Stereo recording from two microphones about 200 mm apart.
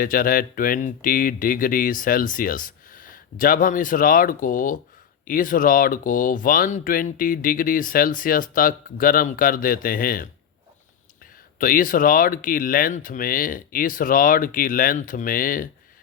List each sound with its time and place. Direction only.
0.0 s speech: 45° left (ahead or behind)
11.6 s speech: 45° left (ahead or behind)